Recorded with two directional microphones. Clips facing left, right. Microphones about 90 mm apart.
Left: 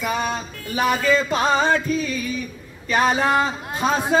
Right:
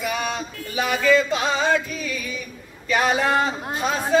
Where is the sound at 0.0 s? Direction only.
35° left (ahead or behind).